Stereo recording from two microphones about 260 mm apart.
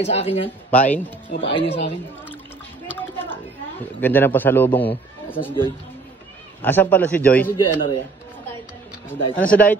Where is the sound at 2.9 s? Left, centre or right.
Centre.